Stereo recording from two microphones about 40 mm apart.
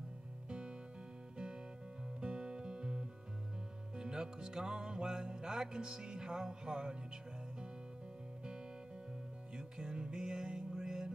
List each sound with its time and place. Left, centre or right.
0.5 s music: right
9.6 s music: centre